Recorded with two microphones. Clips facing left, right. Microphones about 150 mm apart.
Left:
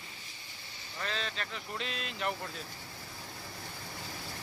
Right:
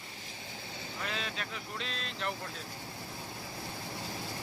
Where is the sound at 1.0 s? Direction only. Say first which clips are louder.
Left 2 dB; 10° right (ahead or behind).